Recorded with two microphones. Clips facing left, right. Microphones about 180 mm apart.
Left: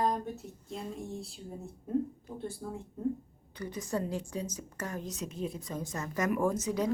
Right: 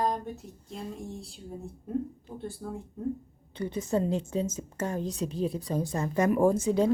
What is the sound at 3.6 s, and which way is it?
A woman's voice, 25° right (ahead or behind).